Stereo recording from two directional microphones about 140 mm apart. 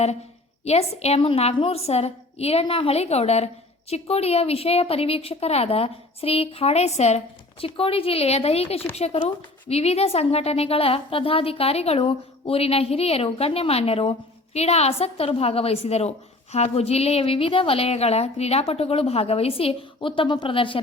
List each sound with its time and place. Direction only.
0.6 s speech: 50° left (ahead or behind)